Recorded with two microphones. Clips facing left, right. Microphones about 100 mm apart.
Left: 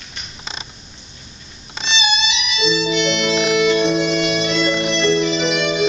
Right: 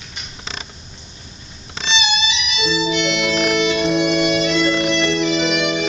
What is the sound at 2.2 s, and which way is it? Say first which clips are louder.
Music: left 2 dB; 5° right (ahead or behind).